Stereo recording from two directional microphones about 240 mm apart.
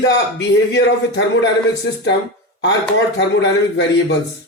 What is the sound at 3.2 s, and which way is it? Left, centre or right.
Speech, left.